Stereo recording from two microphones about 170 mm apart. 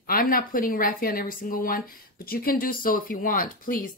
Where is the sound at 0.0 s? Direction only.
60° left (ahead or behind).